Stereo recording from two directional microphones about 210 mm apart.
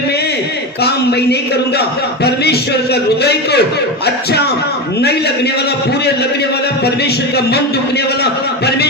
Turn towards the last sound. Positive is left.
turn(degrees=50)  # may be behind; listen again after turning